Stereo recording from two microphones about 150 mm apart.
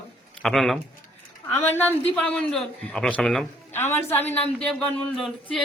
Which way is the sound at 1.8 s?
10° left (ahead or behind).